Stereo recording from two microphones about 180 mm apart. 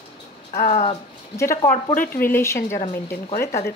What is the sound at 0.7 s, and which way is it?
Speech, 35° left (ahead or behind).